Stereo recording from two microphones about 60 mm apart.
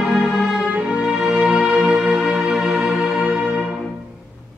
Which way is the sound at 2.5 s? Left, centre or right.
Centre.